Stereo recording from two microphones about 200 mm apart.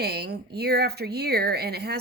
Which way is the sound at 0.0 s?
50° right (ahead or behind).